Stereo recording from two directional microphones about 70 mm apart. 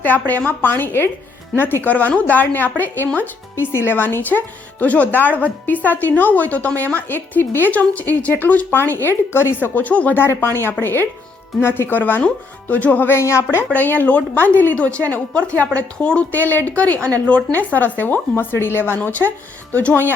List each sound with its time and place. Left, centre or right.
0.0 s speech: left
10.2 s speech: left
13.1 s speech: left
13.7 s speech: left